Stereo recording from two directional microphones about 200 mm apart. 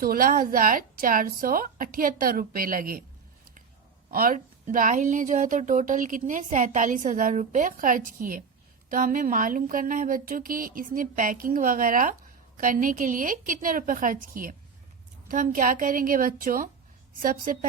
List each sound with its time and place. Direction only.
0.0 s speech: 45° right (ahead or behind)
4.1 s speech: 45° right (ahead or behind)